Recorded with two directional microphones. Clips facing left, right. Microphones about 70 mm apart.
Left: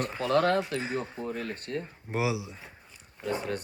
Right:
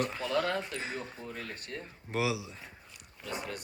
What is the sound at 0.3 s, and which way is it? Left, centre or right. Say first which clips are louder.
Speech: left 8 dB; left.